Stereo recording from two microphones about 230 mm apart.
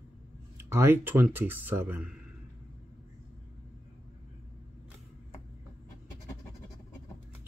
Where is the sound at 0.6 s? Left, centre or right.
Centre.